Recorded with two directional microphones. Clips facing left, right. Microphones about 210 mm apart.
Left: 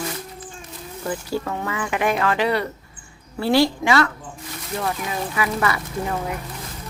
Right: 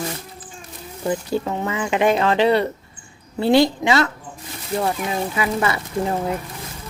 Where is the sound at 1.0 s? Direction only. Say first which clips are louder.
Right 4 dB; 20° right (ahead or behind).